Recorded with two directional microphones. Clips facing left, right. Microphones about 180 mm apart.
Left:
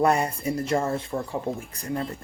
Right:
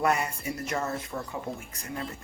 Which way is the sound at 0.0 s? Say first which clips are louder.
Left 5 dB; 35° left (ahead or behind).